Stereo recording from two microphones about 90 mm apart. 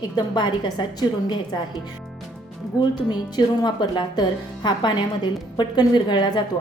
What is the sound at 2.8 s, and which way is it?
Speech, 55° left (ahead or behind).